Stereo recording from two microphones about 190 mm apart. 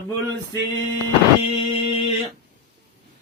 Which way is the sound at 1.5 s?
35° left (ahead or behind).